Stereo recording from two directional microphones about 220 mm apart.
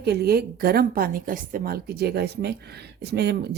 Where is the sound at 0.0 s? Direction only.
45° right (ahead or behind).